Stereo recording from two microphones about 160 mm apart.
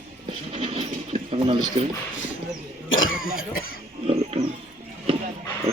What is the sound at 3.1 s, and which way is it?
Cough, 65° left (ahead or behind).